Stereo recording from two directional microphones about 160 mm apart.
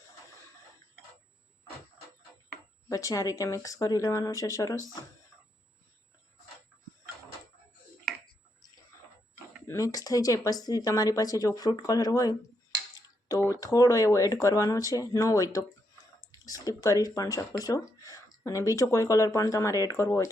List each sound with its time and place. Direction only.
2.9 s speech: 20° left (ahead or behind)
9.6 s speech: 20° left (ahead or behind)
13.2 s a sound: 20° left (ahead or behind)
13.6 s speech: 20° left (ahead or behind)